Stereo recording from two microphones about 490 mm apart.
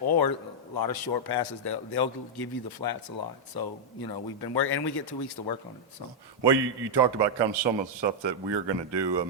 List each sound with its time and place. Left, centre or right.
0.1 s a sound: left
0.8 s a man's voice: left
6.4 s a man's voice: right